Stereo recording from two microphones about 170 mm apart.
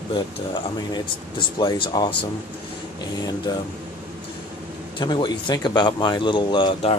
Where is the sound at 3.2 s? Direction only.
25° left (ahead or behind).